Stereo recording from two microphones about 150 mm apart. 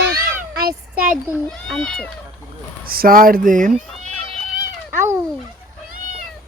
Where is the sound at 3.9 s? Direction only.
Centre (ahead or behind).